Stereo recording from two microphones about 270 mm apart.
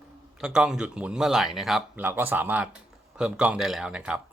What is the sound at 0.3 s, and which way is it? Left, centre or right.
Speech, centre.